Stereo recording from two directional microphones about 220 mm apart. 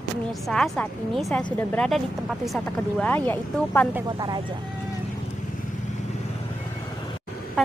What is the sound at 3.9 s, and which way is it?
Speech, 20° right (ahead or behind).